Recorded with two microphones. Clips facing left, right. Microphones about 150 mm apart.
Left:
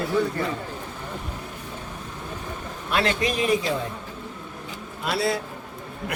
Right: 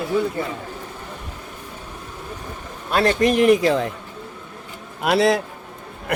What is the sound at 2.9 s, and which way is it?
Speech, 45° right (ahead or behind).